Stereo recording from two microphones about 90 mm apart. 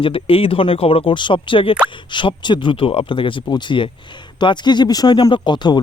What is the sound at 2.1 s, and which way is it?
Speech, 60° left (ahead or behind).